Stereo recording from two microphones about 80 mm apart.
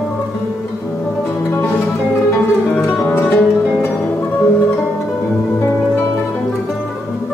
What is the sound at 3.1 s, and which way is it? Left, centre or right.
Music, left.